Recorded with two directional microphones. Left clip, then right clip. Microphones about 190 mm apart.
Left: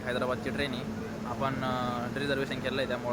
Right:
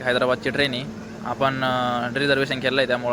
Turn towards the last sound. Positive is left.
turn(degrees=-30)  # may be behind; listen again after turning